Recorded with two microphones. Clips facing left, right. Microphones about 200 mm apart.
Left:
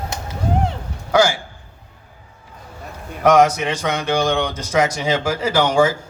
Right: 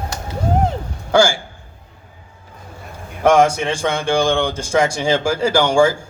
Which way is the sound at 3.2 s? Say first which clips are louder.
Even; 30° right (ahead or behind).